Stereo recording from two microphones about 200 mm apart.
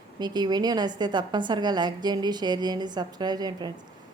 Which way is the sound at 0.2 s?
20° right (ahead or behind).